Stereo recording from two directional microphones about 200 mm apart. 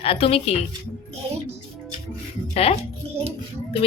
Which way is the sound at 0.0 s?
30° left (ahead or behind).